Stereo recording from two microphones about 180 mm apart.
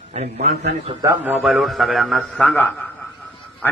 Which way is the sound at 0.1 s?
40° right (ahead or behind).